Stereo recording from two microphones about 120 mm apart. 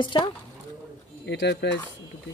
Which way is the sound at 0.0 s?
40° left (ahead or behind).